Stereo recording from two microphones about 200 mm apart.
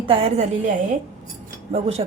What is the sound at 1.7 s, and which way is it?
Speech, 30° right (ahead or behind).